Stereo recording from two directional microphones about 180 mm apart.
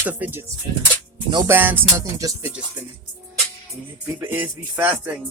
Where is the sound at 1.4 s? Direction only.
10° right (ahead or behind).